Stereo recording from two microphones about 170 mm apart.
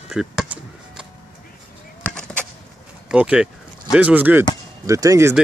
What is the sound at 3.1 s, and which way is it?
Speech, 5° right (ahead or behind).